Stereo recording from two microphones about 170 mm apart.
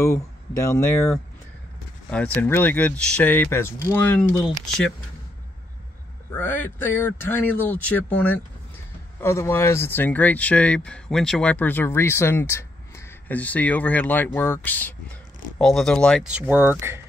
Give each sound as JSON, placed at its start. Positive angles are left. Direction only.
{"t": 0.0, "sound": "speech", "side_deg": 15}
{"t": 6.3, "sound": "speech", "side_deg": 10}